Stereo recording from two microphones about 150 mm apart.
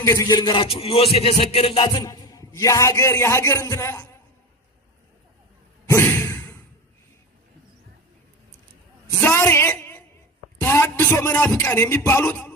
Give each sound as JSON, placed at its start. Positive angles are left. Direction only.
{"t": 0.0, "sound": "music", "side_deg": 20}
{"t": 1.9, "sound": "a man's voice", "side_deg": 25}
{"t": 5.9, "sound": "sigh", "side_deg": 15}
{"t": 9.2, "sound": "a sound", "side_deg": 15}
{"t": 10.6, "sound": "speech", "side_deg": 15}